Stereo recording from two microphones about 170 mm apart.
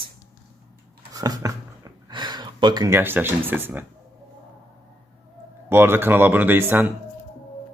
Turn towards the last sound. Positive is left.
turn(degrees=-10)  # may be behind; listen again after turning